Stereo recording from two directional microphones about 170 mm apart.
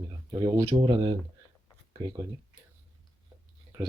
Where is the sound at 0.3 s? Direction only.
15° right (ahead or behind).